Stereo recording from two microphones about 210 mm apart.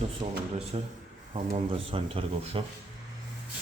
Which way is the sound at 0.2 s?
30° right (ahead or behind).